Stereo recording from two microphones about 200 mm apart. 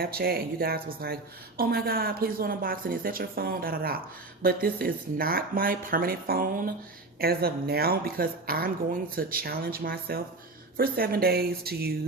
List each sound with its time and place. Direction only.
0.0 s speech: 50° right (ahead or behind)